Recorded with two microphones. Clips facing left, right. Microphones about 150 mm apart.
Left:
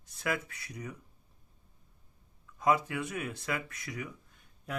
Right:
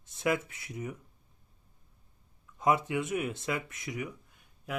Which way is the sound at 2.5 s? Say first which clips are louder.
Right 1 dB; 20° right (ahead or behind).